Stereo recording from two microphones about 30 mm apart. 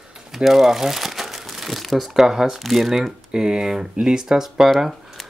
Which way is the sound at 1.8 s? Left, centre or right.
Centre.